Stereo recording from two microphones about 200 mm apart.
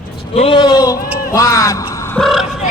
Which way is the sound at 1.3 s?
15° left (ahead or behind).